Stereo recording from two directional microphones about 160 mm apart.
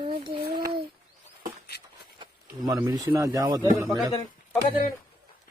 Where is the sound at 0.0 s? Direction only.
30° right (ahead or behind).